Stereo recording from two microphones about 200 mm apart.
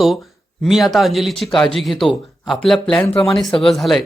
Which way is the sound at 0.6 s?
Centre (ahead or behind).